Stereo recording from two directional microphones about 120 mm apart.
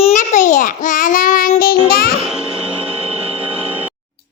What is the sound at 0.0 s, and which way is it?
Child singing, 85° left.